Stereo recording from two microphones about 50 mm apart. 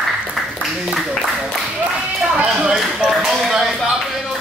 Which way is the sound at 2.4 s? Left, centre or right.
Right.